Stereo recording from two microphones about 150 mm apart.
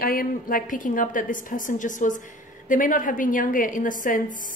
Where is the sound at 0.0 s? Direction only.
75° left (ahead or behind).